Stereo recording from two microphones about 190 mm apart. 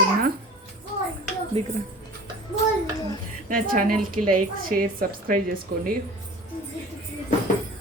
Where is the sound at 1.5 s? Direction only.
30° right (ahead or behind).